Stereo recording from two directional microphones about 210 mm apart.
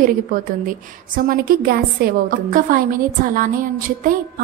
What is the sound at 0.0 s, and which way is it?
A woman's voice, 40° right (ahead or behind).